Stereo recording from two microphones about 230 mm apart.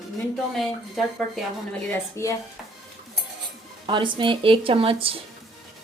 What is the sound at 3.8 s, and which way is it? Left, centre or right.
Speech, right.